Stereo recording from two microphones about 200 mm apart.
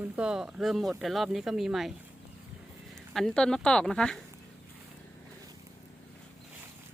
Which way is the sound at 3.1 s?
Centre (ahead or behind).